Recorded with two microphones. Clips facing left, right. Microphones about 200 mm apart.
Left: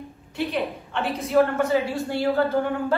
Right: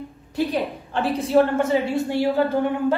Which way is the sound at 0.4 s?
35° right (ahead or behind).